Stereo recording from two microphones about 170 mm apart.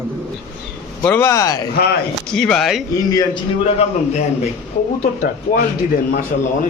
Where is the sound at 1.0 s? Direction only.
15° left (ahead or behind).